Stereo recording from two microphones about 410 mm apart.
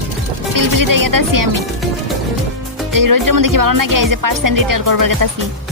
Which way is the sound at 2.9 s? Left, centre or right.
Right.